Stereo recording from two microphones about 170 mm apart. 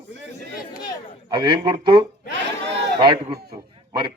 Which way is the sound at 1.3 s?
25° right (ahead or behind).